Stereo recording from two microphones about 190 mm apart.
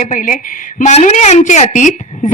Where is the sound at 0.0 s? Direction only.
40° left (ahead or behind).